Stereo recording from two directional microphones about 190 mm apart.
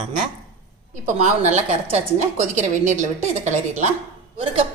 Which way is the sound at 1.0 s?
35° right (ahead or behind).